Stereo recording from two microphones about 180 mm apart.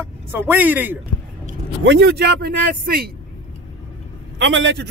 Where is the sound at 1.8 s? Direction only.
80° right; by 3.1 s 55° right (ahead or behind).